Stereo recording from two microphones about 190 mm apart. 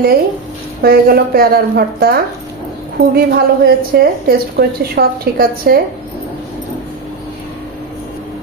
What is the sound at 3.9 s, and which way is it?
A woman's voice, 60° right (ahead or behind).